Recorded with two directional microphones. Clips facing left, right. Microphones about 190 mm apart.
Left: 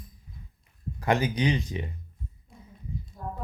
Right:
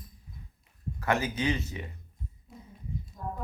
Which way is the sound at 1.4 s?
15° left (ahead or behind).